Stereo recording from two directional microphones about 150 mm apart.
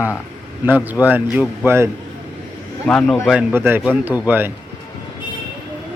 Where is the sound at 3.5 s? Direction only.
15° right (ahead or behind).